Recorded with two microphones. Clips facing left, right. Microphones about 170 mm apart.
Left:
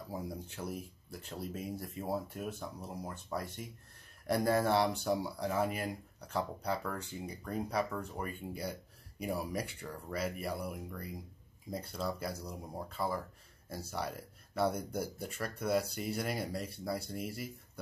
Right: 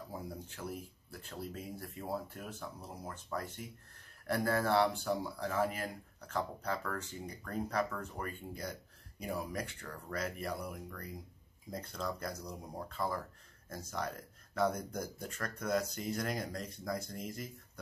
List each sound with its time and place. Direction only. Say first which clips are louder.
0.6 s speech: left 2 dB; 20° left (ahead or behind)